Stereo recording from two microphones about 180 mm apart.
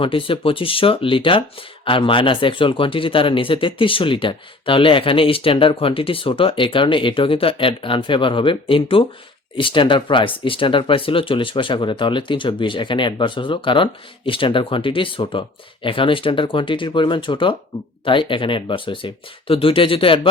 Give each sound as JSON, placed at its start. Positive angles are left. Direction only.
{"t": 0.0, "sound": "speech", "side_deg": 30}